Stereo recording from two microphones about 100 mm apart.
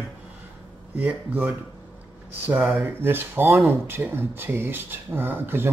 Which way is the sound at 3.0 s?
20° right (ahead or behind).